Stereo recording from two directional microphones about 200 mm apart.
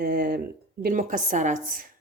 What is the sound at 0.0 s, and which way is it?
A woman's voice, 55° right (ahead or behind).